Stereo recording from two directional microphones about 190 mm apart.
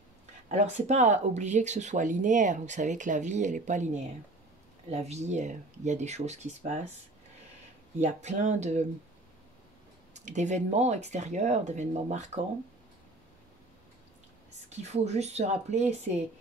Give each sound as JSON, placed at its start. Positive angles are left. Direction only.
{"t": 0.5, "sound": "speech", "side_deg": -40}
{"t": 8.0, "sound": "speech", "side_deg": -40}
{"t": 10.1, "sound": "speech", "side_deg": -40}
{"t": 14.8, "sound": "speech", "side_deg": -35}